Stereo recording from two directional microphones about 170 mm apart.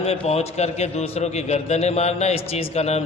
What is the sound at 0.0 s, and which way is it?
A man's voice, 40° left (ahead or behind).